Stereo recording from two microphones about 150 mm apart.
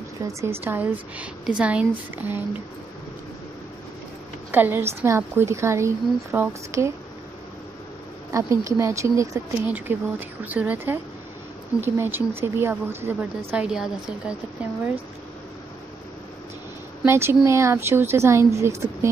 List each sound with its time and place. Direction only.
0.2 s a woman's voice: 20° right (ahead or behind)
4.5 s a woman's voice: 15° right (ahead or behind)
8.3 s a woman's voice: 20° right (ahead or behind)
17.0 s a woman's voice: 15° right (ahead or behind)